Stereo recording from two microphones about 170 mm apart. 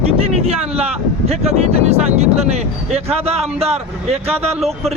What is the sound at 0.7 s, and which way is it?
Speech, 35° right (ahead or behind).